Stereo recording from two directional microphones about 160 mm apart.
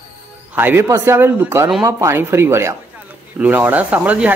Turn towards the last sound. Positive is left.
turn(degrees=-10)  # may be behind; listen again after turning